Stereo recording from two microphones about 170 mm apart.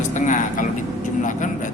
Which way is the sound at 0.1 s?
45° left (ahead or behind).